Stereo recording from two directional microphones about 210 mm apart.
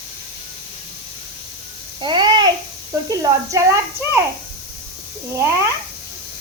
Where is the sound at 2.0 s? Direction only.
20° right (ahead or behind).